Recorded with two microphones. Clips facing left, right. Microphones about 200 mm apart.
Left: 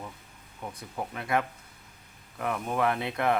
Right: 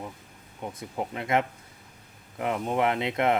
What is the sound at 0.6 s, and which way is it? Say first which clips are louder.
Speech: right 3 dB; 20° right (ahead or behind).